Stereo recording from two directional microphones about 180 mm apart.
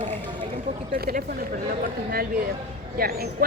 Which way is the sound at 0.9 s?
55° right (ahead or behind).